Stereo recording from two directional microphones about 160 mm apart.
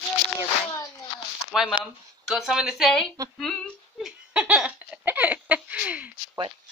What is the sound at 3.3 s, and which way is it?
Giggle, centre (ahead or behind).